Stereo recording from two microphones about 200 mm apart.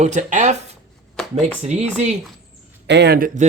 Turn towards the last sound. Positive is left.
turn(degrees=-40)  # may be behind; listen again after turning